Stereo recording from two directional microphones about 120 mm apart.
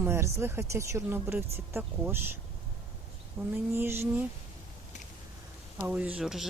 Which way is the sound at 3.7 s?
20° right (ahead or behind).